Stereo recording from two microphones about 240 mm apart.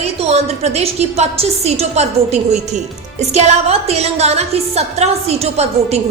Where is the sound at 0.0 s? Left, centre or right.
Right.